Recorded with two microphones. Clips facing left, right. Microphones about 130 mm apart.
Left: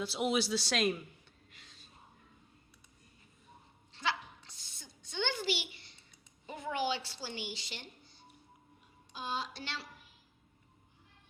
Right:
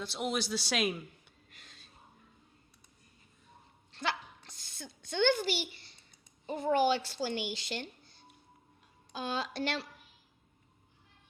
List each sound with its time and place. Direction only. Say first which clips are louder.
0.0 s a man's voice: left 2 dB; 5° left (ahead or behind)
1.5 s gasp: right 3 dB; 55° right (ahead or behind)
3.9 s a sound: right 1 dB; 50° right (ahead or behind)
6.4 s a woman's voice: right 7 dB; 35° right (ahead or behind); by 7.9 s 55° right (ahead or behind)
9.1 s a woman's voice: right 3 dB; 85° right
9.5 s a woman's voice: right 9 dB; 55° right (ahead or behind)